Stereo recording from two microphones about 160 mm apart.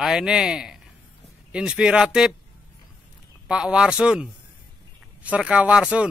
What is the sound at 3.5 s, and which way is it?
Speech, 5° right (ahead or behind).